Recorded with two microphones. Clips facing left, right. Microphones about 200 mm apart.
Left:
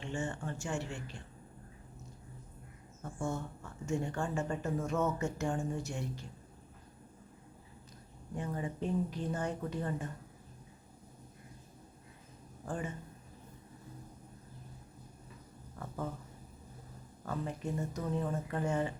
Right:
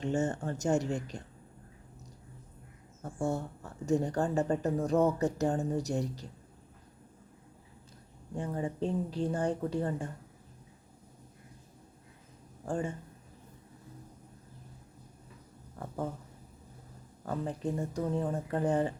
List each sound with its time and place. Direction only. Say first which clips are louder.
0.0 s speech: right 7 dB; 40° right (ahead or behind)
3.0 s speech: right 5 dB; 35° right (ahead or behind)
8.4 s speech: right 4 dB; 30° right (ahead or behind)
12.6 s speech: right 5 dB; 30° right (ahead or behind)
17.2 s speech: right 4 dB; 35° right (ahead or behind)